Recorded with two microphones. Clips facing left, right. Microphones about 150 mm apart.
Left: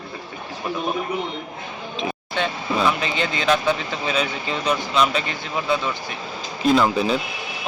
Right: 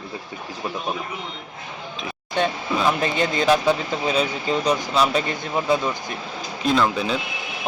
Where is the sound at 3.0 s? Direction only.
45° right (ahead or behind).